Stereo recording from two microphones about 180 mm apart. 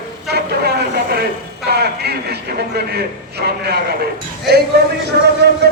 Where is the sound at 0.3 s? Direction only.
60° right (ahead or behind).